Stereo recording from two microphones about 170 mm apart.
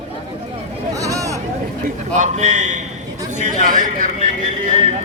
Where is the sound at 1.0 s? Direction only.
20° right (ahead or behind).